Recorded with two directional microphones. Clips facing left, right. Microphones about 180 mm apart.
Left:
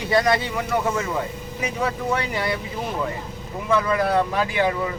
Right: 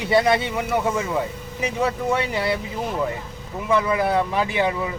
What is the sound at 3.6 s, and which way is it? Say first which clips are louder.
Speech: even; 15° right (ahead or behind).